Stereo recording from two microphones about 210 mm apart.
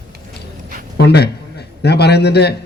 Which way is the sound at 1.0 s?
50° left (ahead or behind).